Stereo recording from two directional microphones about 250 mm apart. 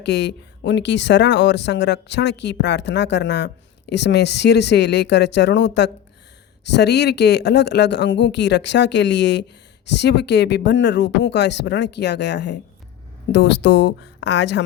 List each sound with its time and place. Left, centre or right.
0.0 s speech: left